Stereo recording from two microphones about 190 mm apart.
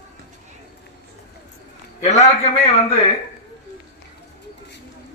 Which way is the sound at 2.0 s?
35° left (ahead or behind).